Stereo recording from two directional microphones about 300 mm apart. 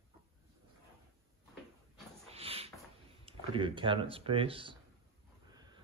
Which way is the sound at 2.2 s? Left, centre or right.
Centre.